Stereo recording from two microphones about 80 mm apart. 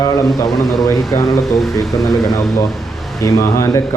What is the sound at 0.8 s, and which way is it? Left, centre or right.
Speech, left.